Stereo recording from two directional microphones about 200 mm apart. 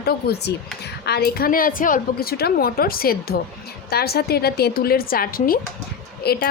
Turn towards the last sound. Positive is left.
turn(degrees=50)  # may be behind; listen again after turning